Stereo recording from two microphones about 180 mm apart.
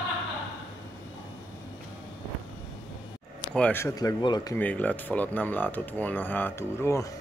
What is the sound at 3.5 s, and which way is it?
Speech, 10° left (ahead or behind).